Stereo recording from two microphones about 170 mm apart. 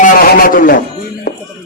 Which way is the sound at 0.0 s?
55° left (ahead or behind).